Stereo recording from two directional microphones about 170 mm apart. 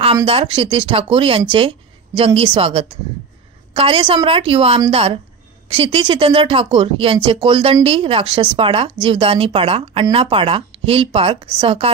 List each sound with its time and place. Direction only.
0.1 s speech: 30° right (ahead or behind)